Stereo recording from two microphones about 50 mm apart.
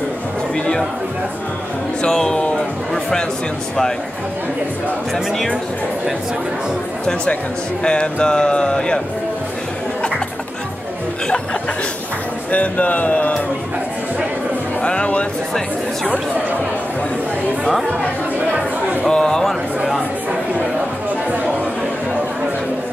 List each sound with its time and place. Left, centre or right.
2.0 s speech: centre
7.8 s speech: centre
12.4 s speech: left
14.8 s speech: left
19.0 s speech: centre